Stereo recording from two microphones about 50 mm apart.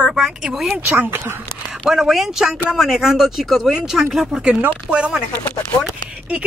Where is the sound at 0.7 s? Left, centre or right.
Right.